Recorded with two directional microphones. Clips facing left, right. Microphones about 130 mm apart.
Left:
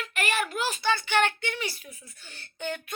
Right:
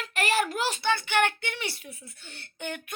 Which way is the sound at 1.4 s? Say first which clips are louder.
Left 2 dB; 65° right (ahead or behind).